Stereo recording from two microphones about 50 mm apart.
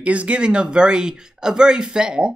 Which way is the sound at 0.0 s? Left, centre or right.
Right.